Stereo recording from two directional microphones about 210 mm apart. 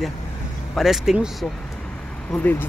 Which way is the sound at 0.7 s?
Centre (ahead or behind).